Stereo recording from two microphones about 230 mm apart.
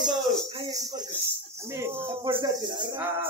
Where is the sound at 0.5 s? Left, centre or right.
Centre.